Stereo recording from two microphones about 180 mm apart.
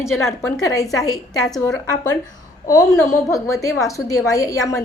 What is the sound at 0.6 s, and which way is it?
Speech, 20° left (ahead or behind).